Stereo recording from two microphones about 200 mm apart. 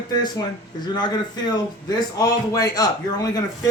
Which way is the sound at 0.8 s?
20° left (ahead or behind).